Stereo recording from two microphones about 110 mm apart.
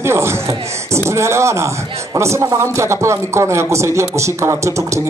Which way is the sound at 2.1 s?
25° right (ahead or behind).